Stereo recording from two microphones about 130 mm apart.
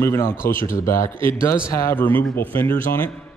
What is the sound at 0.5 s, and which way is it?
Speech, 90° left.